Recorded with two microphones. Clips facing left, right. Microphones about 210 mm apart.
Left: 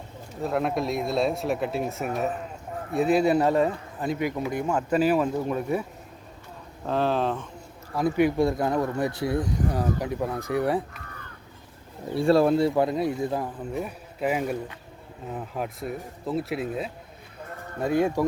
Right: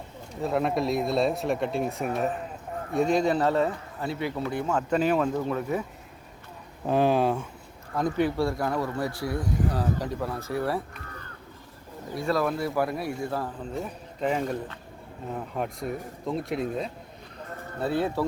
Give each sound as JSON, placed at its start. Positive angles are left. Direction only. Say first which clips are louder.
{"t": 0.4, "sound": "speech", "louder": "even", "side_deg": 0}
{"t": 6.8, "sound": "speech", "louder": "right 2 dB", "side_deg": -15}
{"t": 7.9, "sound": "speech", "louder": "left 3 dB", "side_deg": 10}
{"t": 9.7, "sound": "speech", "louder": "left 2 dB", "side_deg": 10}
{"t": 12.1, "sound": "speech", "louder": "left 7 dB", "side_deg": 30}
{"t": 17.7, "sound": "speech", "louder": "left 3 dB", "side_deg": 15}